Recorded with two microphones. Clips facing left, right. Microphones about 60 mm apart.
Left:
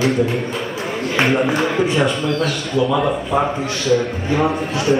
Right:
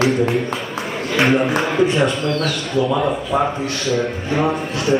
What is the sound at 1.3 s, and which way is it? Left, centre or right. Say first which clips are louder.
A man's voice: even; centre.